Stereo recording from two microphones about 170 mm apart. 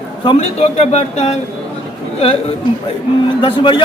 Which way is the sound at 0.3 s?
35° left (ahead or behind).